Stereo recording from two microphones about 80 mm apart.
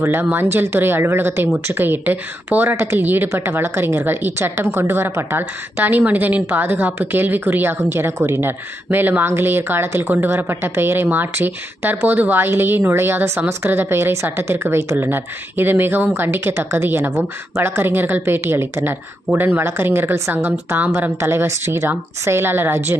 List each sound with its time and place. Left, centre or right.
0.0 s a woman's voice: right